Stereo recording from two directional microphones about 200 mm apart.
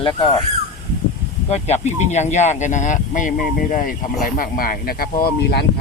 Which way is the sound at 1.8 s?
35° left (ahead or behind).